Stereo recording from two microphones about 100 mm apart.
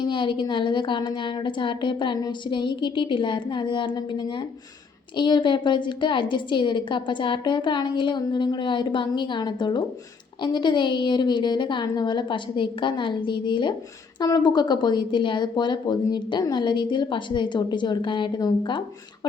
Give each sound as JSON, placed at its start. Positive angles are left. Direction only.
{"t": 0.0, "sound": "a woman's voice", "side_deg": 55}